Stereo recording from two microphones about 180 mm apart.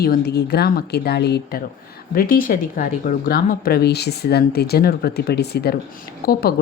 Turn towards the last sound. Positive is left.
turn(degrees=55)  # may be behind; listen again after turning